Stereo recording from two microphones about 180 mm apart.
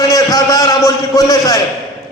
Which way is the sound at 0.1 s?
20° left (ahead or behind).